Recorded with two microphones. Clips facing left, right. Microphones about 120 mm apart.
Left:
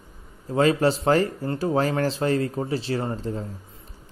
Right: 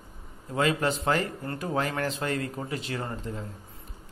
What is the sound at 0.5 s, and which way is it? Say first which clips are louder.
Speech: left 6 dB; 35° left (ahead or behind).